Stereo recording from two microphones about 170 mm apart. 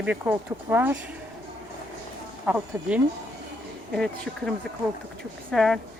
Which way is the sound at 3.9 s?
Centre (ahead or behind).